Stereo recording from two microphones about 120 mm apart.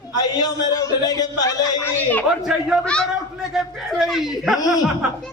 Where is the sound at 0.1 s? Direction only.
35° left (ahead or behind).